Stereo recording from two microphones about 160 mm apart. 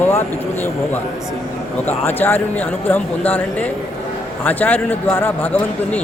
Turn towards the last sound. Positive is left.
turn(degrees=10)  # may be behind; listen again after turning